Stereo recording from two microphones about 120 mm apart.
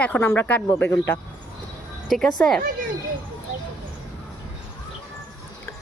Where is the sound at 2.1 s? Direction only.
5° left (ahead or behind).